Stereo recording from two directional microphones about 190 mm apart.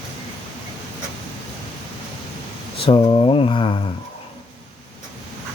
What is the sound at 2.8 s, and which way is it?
Speech, 25° left (ahead or behind).